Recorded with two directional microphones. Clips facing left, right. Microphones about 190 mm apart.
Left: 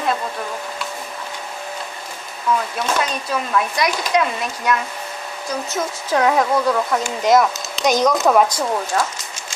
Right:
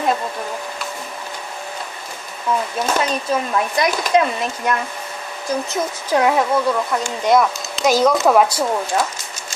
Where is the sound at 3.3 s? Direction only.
25° right (ahead or behind).